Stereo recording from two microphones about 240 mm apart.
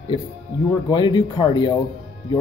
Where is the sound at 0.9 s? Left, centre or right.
Centre.